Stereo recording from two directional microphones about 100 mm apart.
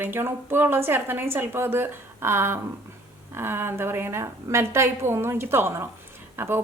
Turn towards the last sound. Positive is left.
turn(degrees=-25)  # may be behind; listen again after turning